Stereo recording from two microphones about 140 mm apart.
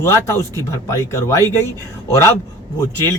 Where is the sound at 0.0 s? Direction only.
20° left (ahead or behind).